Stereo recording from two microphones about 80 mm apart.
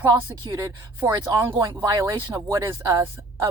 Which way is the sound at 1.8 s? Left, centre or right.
Right.